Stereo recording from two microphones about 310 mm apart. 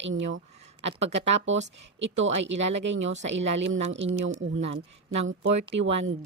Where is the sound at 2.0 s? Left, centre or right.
Right.